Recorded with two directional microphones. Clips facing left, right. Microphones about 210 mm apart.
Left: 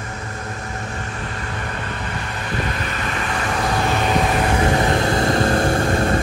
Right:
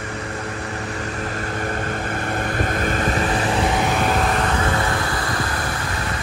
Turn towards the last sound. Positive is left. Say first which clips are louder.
# left 9 dB
turn(degrees=50)  # may be behind; listen again after turning